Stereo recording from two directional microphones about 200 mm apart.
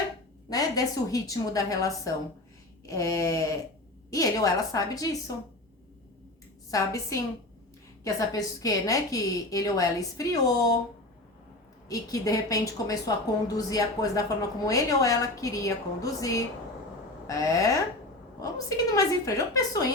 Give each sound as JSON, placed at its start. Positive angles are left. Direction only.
{"t": 0.5, "sound": "a woman's voice", "side_deg": 15}
{"t": 6.7, "sound": "a woman's voice", "side_deg": 15}
{"t": 11.9, "sound": "a woman's voice", "side_deg": 15}